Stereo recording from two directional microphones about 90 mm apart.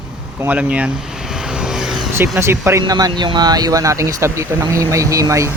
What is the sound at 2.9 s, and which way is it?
Speech, 45° right (ahead or behind).